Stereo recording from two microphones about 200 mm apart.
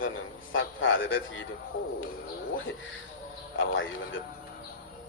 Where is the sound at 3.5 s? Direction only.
75° left (ahead or behind).